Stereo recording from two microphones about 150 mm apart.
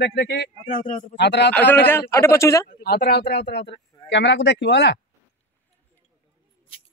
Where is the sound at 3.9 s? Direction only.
25° left (ahead or behind).